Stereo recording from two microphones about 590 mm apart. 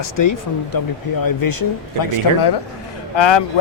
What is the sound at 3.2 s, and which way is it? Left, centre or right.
Speech, left.